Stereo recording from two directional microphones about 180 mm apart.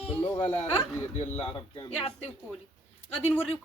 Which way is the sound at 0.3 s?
10° left (ahead or behind).